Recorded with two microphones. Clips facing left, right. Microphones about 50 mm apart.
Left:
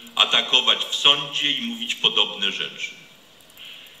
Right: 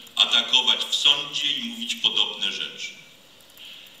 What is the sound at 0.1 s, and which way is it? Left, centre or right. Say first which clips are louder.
Mantra: left 2 dB; left.